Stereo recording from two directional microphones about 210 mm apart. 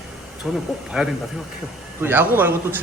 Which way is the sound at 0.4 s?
Centre (ahead or behind).